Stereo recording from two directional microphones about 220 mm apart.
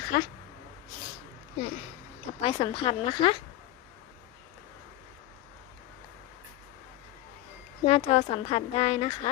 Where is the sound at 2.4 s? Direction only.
25° left (ahead or behind).